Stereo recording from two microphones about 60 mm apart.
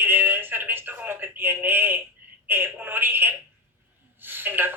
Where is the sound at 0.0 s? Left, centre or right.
Right.